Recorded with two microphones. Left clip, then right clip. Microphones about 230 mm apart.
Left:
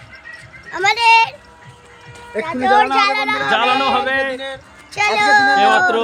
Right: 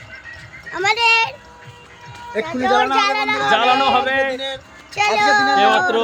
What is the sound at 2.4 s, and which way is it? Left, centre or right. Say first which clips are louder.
Speech: left 3 dB; centre.